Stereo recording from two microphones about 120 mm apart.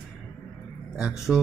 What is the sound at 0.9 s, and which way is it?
Speech, 5° right (ahead or behind).